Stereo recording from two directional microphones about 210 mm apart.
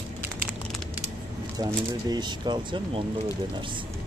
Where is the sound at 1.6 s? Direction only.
20° right (ahead or behind).